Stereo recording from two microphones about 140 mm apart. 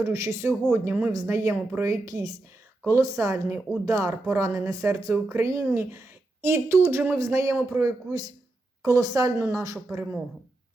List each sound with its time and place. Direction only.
0.0 s speech: 20° right (ahead or behind)
10.0 s speech: 10° right (ahead or behind)